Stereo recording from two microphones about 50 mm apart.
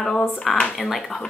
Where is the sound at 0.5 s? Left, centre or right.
Left.